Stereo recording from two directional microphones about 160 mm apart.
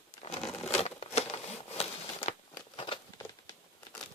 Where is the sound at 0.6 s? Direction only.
40° left (ahead or behind).